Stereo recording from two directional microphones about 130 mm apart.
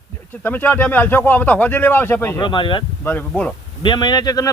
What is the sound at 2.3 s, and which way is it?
Speech, 40° left (ahead or behind).